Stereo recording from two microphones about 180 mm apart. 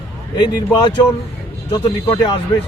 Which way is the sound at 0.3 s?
25° left (ahead or behind).